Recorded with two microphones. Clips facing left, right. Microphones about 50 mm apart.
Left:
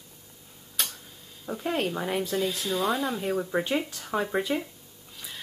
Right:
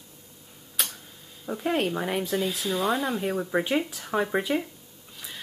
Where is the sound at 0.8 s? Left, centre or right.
Centre.